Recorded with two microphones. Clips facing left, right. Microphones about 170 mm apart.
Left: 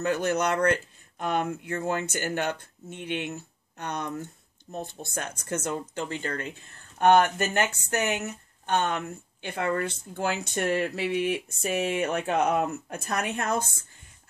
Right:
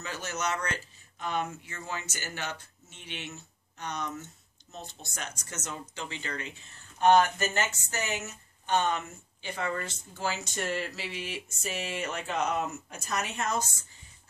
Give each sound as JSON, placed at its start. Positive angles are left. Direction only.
{"t": 0.0, "sound": "speech", "side_deg": 55}